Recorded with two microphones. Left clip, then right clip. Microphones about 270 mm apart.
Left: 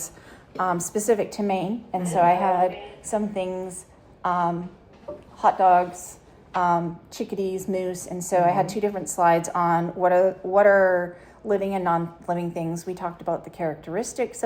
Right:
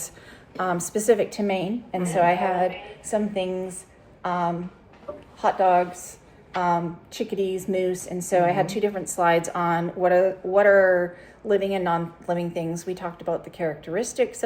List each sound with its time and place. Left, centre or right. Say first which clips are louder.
0.5 s a woman's voice: left 1 dB; centre